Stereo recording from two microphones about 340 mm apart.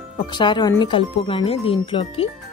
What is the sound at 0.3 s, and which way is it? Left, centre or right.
Speech, centre.